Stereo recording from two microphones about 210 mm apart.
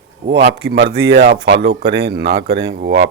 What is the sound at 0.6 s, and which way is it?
Speech, 50° right (ahead or behind).